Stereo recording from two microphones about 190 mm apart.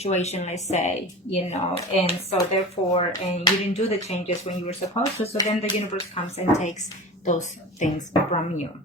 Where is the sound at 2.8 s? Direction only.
25° left (ahead or behind).